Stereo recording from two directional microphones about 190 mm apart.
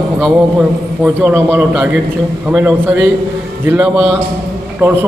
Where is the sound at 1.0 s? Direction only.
10° right (ahead or behind).